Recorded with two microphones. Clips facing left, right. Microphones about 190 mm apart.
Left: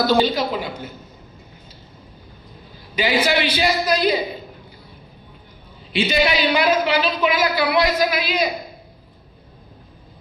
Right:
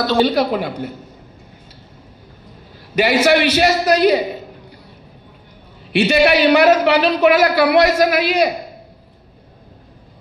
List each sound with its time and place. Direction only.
0.3 s a woman's voice: 60° right (ahead or behind)
3.0 s speech: 70° right (ahead or behind)
5.9 s speech: 70° right (ahead or behind)